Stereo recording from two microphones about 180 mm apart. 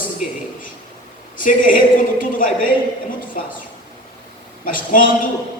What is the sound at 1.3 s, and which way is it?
A man's voice, 50° left (ahead or behind).